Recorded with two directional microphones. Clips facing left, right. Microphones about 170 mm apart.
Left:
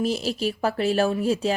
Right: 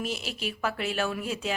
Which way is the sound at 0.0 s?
35° left (ahead or behind).